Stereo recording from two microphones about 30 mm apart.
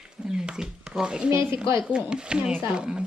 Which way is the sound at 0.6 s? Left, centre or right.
Centre.